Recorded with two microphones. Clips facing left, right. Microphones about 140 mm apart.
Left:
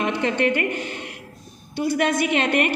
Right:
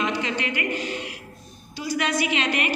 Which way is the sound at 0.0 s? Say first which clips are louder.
Left 5 dB; 55° left (ahead or behind).